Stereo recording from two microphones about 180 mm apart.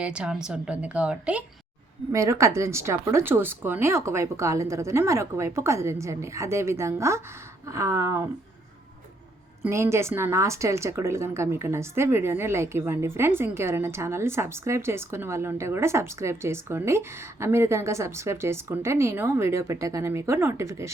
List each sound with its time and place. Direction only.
0.0 s a woman's voice: 5° right (ahead or behind)
9.6 s a woman's voice: 15° right (ahead or behind)